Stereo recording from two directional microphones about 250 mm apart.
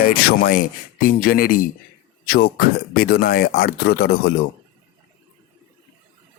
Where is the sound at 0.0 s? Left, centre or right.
Left.